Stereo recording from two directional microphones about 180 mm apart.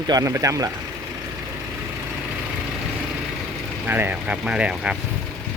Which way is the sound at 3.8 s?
10° right (ahead or behind).